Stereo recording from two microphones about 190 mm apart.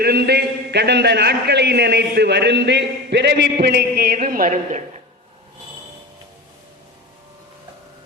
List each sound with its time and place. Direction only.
0.0 s a man's voice: 55° right (ahead or behind)